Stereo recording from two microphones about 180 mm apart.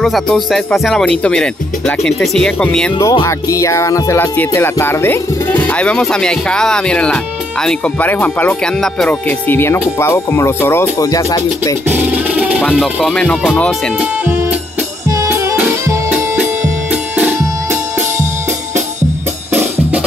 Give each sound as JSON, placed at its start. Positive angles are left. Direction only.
{"t": 0.0, "sound": "speech", "side_deg": 0}
{"t": 3.0, "sound": "music", "side_deg": 20}
{"t": 11.9, "sound": "music", "side_deg": -10}
{"t": 12.6, "sound": "speech", "side_deg": 0}
{"t": 15.0, "sound": "music", "side_deg": -20}